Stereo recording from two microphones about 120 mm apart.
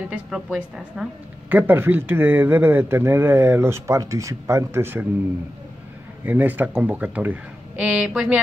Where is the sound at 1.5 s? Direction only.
15° right (ahead or behind).